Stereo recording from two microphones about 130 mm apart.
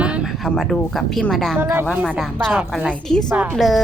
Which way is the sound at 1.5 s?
15° right (ahead or behind).